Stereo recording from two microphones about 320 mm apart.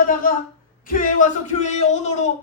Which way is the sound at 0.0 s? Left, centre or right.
Left.